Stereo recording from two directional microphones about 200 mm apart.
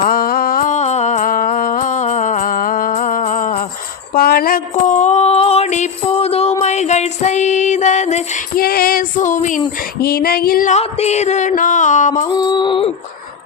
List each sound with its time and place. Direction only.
0.0 s music: 45° left (ahead or behind)
4.1 s a sound: 50° left (ahead or behind)
8.6 s female singing: 50° left (ahead or behind)
10.0 s music: 50° left (ahead or behind)
12.3 s mantra: 20° left (ahead or behind)